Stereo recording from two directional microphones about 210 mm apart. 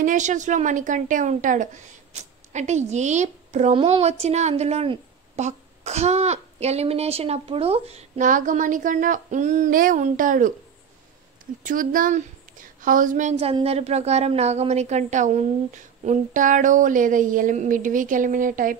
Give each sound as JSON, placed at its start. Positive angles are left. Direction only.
{"t": 0.0, "sound": "a woman's voice", "side_deg": -35}
{"t": 11.6, "sound": "a woman's voice", "side_deg": -40}